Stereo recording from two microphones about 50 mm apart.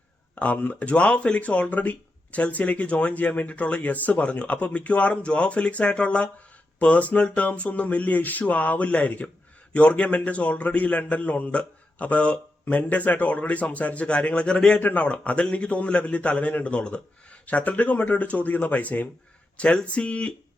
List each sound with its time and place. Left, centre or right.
0.3 s a man's voice: left
14.8 s speech: left
15.0 s a man's voice: left